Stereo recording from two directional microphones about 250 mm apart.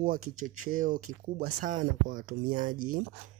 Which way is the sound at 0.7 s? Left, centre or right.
Right.